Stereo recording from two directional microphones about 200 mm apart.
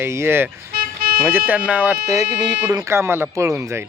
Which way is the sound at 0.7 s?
50° right (ahead or behind).